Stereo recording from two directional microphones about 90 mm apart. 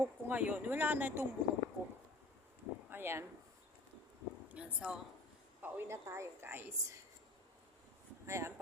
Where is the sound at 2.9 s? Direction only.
25° right (ahead or behind).